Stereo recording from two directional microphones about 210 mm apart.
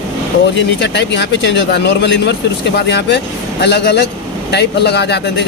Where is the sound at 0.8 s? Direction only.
55° left (ahead or behind).